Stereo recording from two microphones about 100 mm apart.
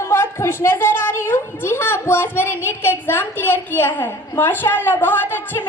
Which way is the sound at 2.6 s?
25° left (ahead or behind).